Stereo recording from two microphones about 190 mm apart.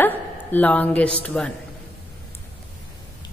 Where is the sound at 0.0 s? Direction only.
10° left (ahead or behind).